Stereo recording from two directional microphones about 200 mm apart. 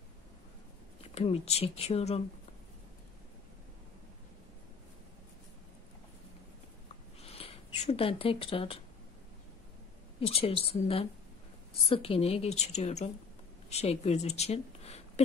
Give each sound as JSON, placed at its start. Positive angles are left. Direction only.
{"t": 1.0, "sound": "a woman's voice", "side_deg": 30}
{"t": 7.2, "sound": "a sound", "side_deg": 30}
{"t": 10.2, "sound": "a woman's voice", "side_deg": 30}